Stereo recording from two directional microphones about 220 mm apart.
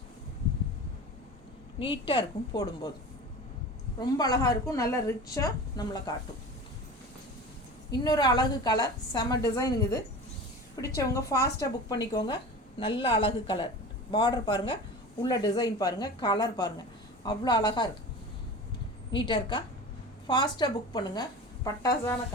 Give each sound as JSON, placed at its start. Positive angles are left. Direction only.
{"t": 1.8, "sound": "a woman's voice", "side_deg": 20}
{"t": 4.0, "sound": "a woman's voice", "side_deg": 15}
{"t": 8.0, "sound": "a woman's voice", "side_deg": 20}
{"t": 19.1, "sound": "a woman's voice", "side_deg": 20}